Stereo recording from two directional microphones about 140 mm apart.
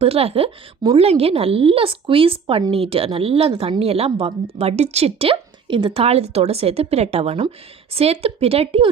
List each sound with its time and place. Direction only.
0.0 s speech: 45° right (ahead or behind)